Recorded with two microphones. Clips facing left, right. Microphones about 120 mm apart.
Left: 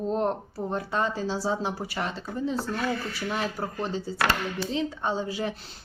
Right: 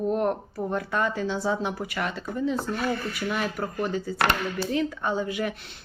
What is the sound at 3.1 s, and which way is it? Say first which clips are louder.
A woman's voice: right 2 dB; 35° left (ahead or behind).